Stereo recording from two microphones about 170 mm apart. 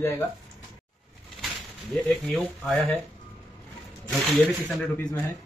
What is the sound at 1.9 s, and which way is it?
Speech, centre (ahead or behind).